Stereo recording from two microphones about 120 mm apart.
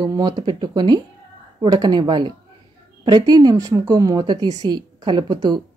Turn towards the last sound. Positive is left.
turn(degrees=-40)  # may be behind; listen again after turning